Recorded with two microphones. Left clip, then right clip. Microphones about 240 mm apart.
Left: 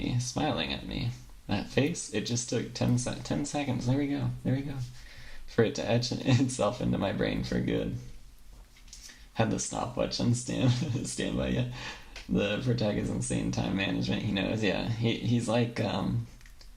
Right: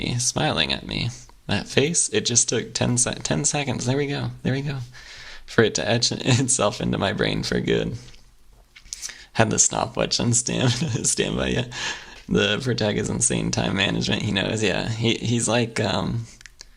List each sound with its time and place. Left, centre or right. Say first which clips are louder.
0.0 s speech: right 8 dB; right
9.3 s speech: right 10 dB; right